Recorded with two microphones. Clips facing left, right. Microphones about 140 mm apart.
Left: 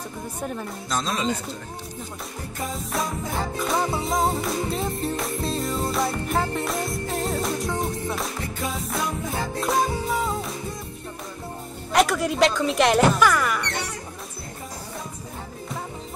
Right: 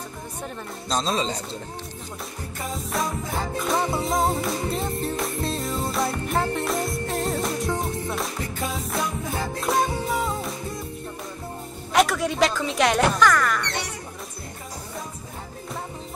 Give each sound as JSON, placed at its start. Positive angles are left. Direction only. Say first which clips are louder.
{"t": 0.8, "sound": "speech", "louder": "right 1 dB", "side_deg": -25}
{"t": 2.6, "sound": "music", "louder": "even", "side_deg": 0}
{"t": 11.9, "sound": "speech", "louder": "even", "side_deg": 0}